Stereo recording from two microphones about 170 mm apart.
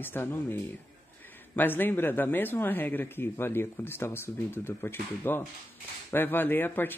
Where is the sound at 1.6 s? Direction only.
10° left (ahead or behind).